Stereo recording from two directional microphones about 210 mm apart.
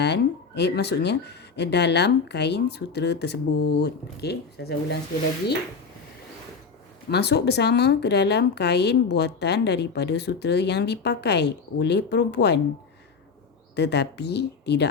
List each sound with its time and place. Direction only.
0.6 s speech: 50° left (ahead or behind)
7.1 s speech: 50° left (ahead or behind)
13.7 s speech: 55° left (ahead or behind)